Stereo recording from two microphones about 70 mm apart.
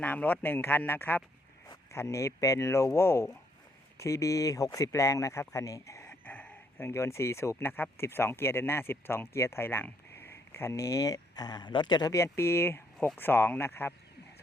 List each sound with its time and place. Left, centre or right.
0.0 s speech: left
1.9 s speech: left
6.2 s a sound: left
7.5 s speech: left
10.2 s a sound: left
10.8 s speech: left
12.1 s speech: left